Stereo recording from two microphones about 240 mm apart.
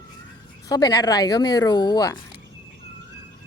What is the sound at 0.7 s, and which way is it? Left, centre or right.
Speech, centre.